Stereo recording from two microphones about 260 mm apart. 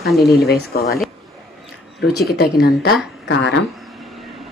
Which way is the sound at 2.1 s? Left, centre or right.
Left.